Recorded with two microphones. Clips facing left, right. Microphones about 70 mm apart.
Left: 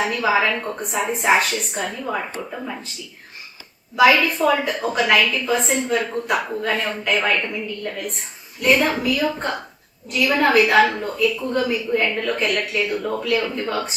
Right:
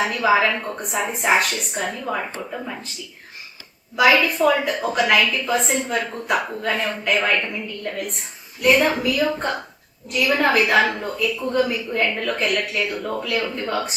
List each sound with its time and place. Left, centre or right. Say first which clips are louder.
0.0 s a woman's voice: right 1 dB; centre
3.9 s a woman's voice: left 1 dB; centre
8.6 s a woman's voice: right 1 dB; centre